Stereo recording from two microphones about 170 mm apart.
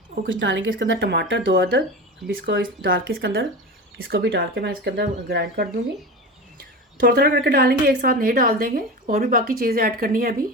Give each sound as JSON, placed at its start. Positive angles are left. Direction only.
{"t": 0.3, "sound": "speech", "side_deg": -90}